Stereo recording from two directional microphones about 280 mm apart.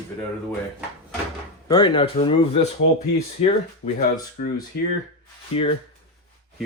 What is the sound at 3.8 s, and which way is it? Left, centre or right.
Speech, left.